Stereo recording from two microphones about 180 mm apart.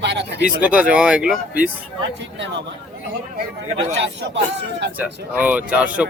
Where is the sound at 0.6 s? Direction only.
5° right (ahead or behind).